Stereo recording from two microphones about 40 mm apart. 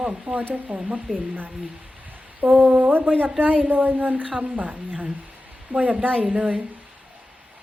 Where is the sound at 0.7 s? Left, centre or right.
Right.